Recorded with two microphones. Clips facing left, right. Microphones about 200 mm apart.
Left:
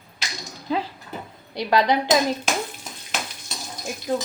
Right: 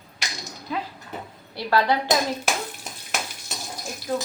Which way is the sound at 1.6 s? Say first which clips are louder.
Left 2 dB; 15° left (ahead or behind).